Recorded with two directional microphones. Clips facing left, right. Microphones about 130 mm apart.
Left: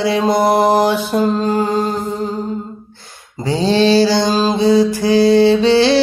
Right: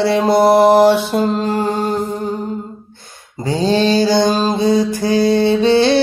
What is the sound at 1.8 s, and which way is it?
Music, 60° right (ahead or behind).